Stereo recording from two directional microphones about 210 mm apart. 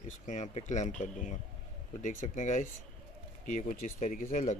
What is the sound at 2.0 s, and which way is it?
Speech, 35° left (ahead or behind).